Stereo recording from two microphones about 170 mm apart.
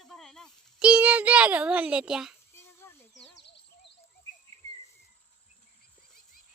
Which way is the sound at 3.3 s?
90° left.